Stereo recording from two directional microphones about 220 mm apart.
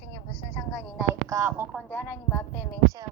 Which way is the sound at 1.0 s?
15° right (ahead or behind).